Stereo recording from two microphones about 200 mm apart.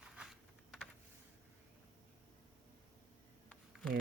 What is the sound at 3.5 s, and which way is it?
Camera, 5° left (ahead or behind).